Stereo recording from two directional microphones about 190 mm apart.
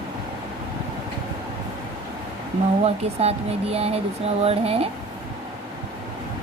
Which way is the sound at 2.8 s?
35° right (ahead or behind).